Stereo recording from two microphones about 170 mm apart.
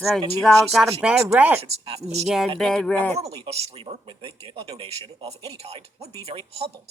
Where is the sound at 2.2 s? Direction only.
Centre (ahead or behind).